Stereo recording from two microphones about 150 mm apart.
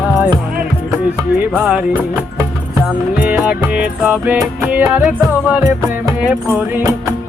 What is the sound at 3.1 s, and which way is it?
Music, 10° right (ahead or behind).